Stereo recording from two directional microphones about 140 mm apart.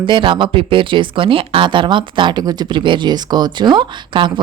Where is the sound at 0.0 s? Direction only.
35° right (ahead or behind).